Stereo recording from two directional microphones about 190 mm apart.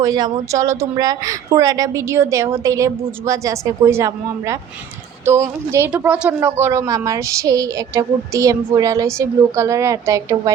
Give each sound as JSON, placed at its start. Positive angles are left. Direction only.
{"t": 0.0, "sound": "speech", "side_deg": -20}